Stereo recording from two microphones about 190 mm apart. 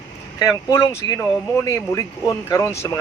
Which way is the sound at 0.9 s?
15° left (ahead or behind).